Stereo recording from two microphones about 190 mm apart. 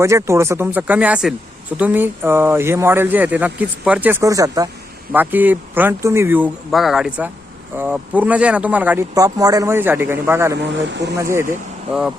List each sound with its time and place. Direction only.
0.0 s speech: 15° right (ahead or behind)
10.8 s speech: 70° right (ahead or behind)
11.2 s speech: 15° right (ahead or behind)